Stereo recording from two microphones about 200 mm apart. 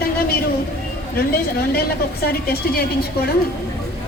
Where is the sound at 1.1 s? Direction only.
50° left (ahead or behind).